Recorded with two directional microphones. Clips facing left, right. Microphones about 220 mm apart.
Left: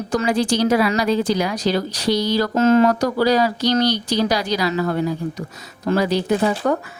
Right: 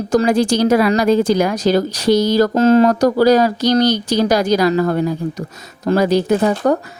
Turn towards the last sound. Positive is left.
turn(degrees=-45)  # may be behind; listen again after turning